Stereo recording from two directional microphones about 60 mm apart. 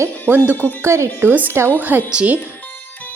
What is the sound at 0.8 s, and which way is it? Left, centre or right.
Speech, right.